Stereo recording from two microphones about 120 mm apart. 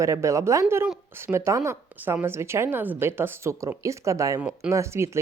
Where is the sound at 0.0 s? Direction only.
25° right (ahead or behind).